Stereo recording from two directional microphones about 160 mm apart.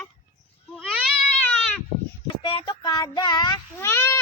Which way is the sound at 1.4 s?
10° left (ahead or behind).